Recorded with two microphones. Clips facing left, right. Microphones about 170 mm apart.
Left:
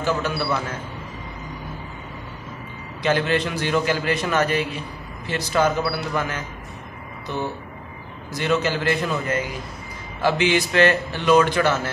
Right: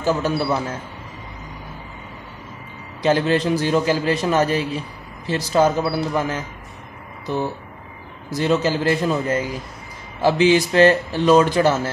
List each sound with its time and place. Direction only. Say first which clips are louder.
0.0 s a man's voice: right 3 dB; 40° right (ahead or behind)
3.0 s a man's voice: right 3 dB; 35° right (ahead or behind)
8.4 s a man's voice: right 3 dB; 35° right (ahead or behind)